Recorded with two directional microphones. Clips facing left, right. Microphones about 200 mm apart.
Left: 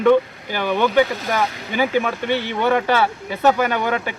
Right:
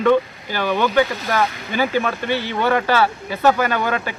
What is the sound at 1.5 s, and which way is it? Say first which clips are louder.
Speech: even; 35° left (ahead or behind).